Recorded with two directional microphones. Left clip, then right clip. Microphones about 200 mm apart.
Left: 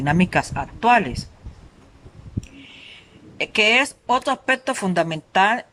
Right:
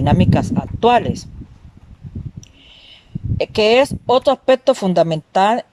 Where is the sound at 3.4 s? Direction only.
25° right (ahead or behind).